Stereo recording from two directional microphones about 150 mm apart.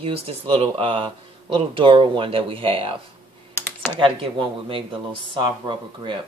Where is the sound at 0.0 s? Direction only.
40° right (ahead or behind).